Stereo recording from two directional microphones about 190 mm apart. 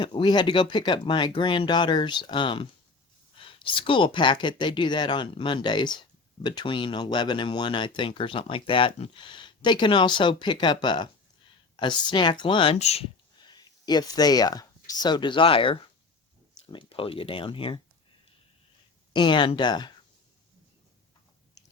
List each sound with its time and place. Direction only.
0.0 s speech: 25° left (ahead or behind)
13.5 s speech: 20° left (ahead or behind)
19.1 s speech: 25° left (ahead or behind)